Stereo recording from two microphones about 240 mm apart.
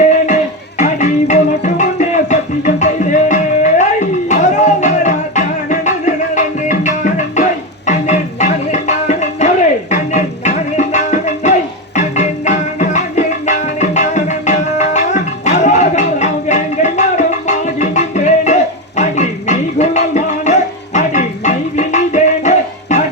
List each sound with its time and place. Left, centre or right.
0.8 s music: left